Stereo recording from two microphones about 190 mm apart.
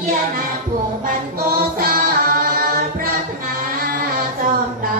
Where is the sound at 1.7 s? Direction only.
55° right (ahead or behind).